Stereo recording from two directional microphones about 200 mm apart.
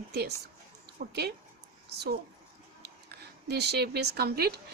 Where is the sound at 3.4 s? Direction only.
55° right (ahead or behind).